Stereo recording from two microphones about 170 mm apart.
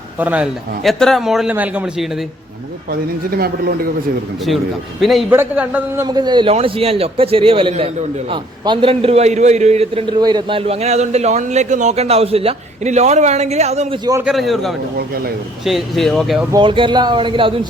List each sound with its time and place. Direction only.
0.2 s a man's voice: 10° right (ahead or behind)
3.2 s speech: 65° right (ahead or behind)
4.4 s a man's voice: centre (ahead or behind)
5.3 s a man's voice: 10° right (ahead or behind)
6.1 s a man's voice: 25° right (ahead or behind)
14.0 s speech: 20° right (ahead or behind)
14.3 s a man's voice: centre (ahead or behind)
14.9 s speech: 65° right (ahead or behind)
15.6 s a man's voice: centre (ahead or behind)
16.5 s speech: 30° right (ahead or behind)